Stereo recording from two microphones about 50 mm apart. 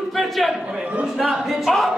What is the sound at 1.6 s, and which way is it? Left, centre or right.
Speech, centre.